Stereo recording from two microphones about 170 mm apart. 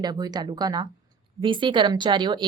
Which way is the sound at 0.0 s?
25° right (ahead or behind).